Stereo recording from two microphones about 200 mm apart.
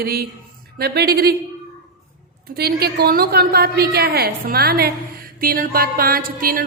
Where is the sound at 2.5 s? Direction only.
50° right (ahead or behind).